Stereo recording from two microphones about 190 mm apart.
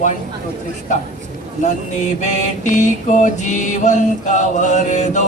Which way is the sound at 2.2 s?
40° left (ahead or behind).